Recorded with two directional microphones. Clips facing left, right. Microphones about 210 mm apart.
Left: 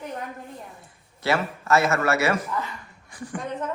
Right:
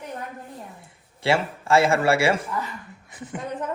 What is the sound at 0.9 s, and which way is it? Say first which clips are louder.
A man's voice: right 2 dB; 25° right (ahead or behind).